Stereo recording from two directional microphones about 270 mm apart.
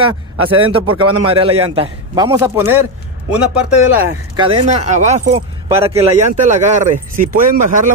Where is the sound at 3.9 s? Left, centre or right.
Centre.